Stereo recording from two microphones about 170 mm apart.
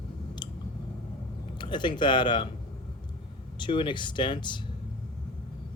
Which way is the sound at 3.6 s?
30° left (ahead or behind).